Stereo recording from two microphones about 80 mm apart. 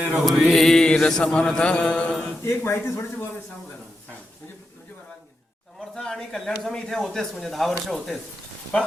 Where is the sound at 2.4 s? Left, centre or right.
Left.